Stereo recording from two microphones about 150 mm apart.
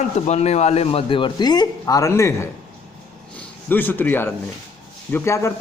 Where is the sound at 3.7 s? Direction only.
15° left (ahead or behind).